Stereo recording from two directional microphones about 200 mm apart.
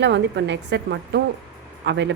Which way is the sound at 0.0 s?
60° right (ahead or behind).